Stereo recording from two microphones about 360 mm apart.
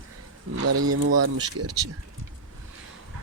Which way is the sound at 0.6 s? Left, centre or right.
Right.